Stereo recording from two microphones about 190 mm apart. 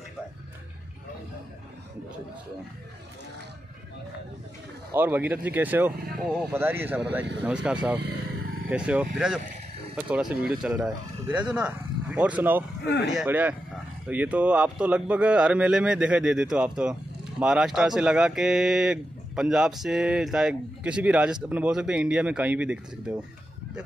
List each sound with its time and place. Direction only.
4.9 s speech: 10° right (ahead or behind)
12.8 s speech: 65° left (ahead or behind)
13.1 s speech: 5° right (ahead or behind)